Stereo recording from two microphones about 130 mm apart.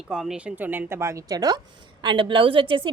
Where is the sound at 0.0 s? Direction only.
5° right (ahead or behind).